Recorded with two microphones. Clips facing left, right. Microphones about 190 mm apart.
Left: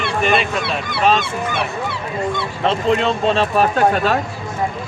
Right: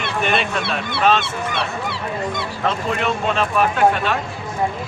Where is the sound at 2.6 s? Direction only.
25° left (ahead or behind).